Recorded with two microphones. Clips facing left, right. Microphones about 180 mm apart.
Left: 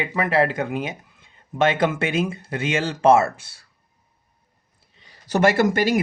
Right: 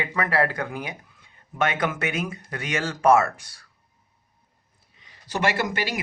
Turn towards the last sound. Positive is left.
turn(degrees=45)  # may be behind; listen again after turning